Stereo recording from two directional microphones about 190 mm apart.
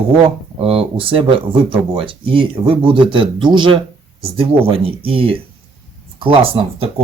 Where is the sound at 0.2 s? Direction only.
30° right (ahead or behind).